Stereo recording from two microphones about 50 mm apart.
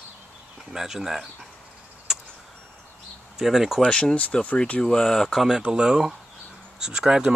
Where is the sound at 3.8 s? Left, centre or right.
Centre.